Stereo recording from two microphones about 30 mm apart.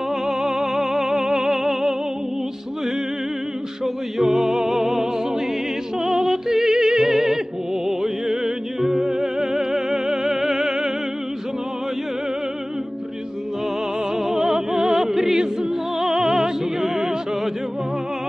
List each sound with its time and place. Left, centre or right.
0.3 s music: centre
3.8 s music: centre
14.1 s music: centre